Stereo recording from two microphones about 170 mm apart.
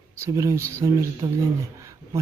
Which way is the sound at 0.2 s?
20° right (ahead or behind).